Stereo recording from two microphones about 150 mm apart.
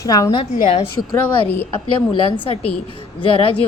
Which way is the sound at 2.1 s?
35° left (ahead or behind).